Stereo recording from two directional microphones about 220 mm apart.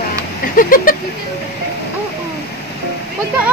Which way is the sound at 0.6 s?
40° left (ahead or behind).